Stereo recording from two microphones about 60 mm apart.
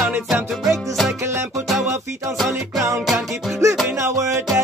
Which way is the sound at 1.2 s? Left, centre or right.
Right.